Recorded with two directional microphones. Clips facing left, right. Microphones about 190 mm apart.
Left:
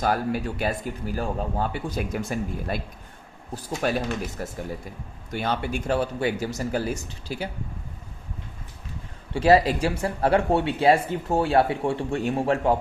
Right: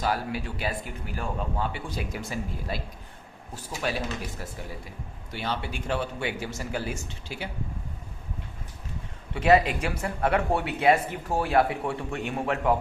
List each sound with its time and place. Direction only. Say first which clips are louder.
0.0 s speech: left 4 dB; 45° left (ahead or behind)
9.3 s speech: left 3 dB; 35° left (ahead or behind)